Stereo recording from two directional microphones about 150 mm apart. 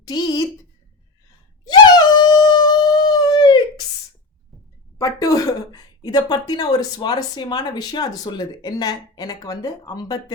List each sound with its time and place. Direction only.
0.0 s a woman's voice: 25° left (ahead or behind)
1.6 s a sound: 30° left (ahead or behind)
4.9 s a woman's voice: 25° left (ahead or behind)